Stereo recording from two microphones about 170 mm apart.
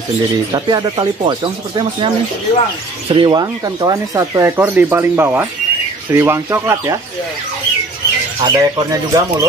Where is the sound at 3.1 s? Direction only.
25° right (ahead or behind).